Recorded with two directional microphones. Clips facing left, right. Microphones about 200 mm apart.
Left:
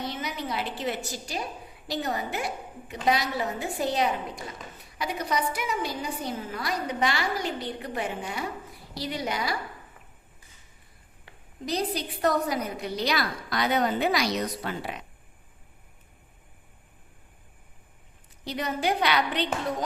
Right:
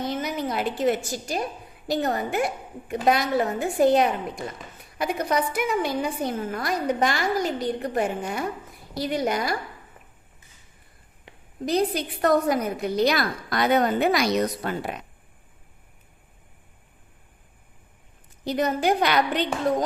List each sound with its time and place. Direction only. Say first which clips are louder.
0.0 s a sound: right 6 dB; 50° right (ahead or behind)
1.9 s a woman's voice: right 5 dB; 50° right (ahead or behind)
11.6 s a woman's voice: right 6 dB; 55° right (ahead or behind)
18.4 s a woman's voice: right 5 dB; 45° right (ahead or behind)